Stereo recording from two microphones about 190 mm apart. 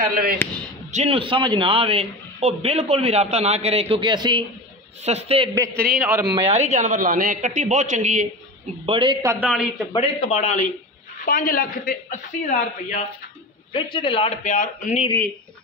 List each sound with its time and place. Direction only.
0.4 s speech: 10° left (ahead or behind)
0.9 s a man's voice: 30° right (ahead or behind)
5.9 s a man's voice: 10° right (ahead or behind)
6.3 s a man's voice: 35° right (ahead or behind)
8.8 s a man's voice: 25° right (ahead or behind); by 9.7 s 5° right (ahead or behind)
9.9 s speech: 30° left (ahead or behind)
11.2 s speech: 50° left (ahead or behind)
13.7 s speech: 25° left (ahead or behind); by 15.0 s 40° left (ahead or behind)